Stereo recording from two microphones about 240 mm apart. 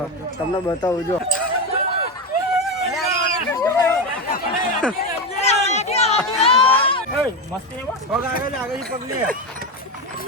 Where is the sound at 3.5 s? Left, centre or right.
Centre.